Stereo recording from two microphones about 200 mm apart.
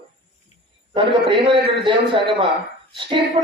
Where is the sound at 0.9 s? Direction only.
25° right (ahead or behind).